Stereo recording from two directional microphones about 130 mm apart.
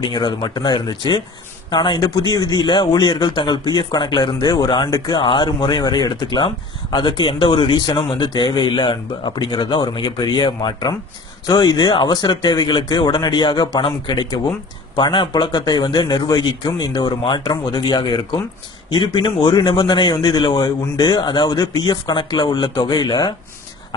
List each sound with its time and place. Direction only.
0.0 s a man's voice: 35° left (ahead or behind)